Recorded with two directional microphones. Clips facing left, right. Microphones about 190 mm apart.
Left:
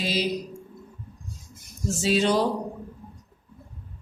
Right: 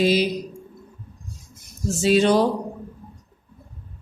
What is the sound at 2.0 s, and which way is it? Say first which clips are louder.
Speech: right 5 dB; 55° right (ahead or behind).